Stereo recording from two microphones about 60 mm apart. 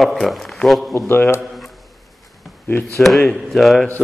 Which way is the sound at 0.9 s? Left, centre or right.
Left.